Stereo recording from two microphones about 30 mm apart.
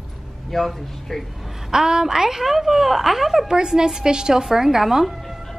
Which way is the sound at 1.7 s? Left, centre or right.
Right.